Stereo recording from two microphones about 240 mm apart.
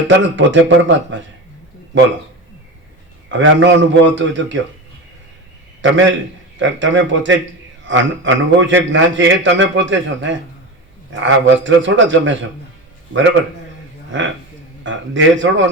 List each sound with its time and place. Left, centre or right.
0.1 s a man's voice: right
3.2 s a man's voice: right
5.8 s a man's voice: right
14.8 s a man's voice: right